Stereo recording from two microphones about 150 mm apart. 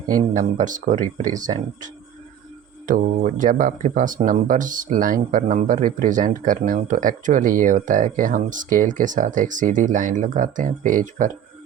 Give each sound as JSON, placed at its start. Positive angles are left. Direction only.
{"t": 0.2, "sound": "speech", "side_deg": -60}
{"t": 2.8, "sound": "speech", "side_deg": -60}